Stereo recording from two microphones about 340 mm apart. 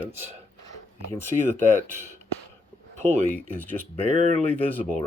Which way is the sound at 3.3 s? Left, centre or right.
Centre.